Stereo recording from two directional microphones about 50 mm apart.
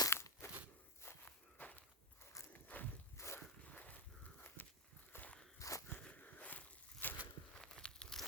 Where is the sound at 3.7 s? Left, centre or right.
Left.